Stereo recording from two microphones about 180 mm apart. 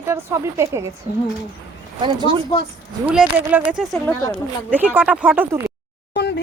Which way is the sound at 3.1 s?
10° right (ahead or behind).